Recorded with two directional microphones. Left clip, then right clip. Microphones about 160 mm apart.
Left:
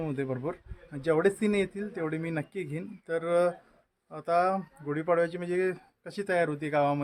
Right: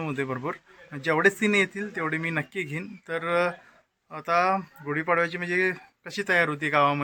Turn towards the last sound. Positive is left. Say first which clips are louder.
# right 5 dB
turn(degrees=5)  # may be behind; listen again after turning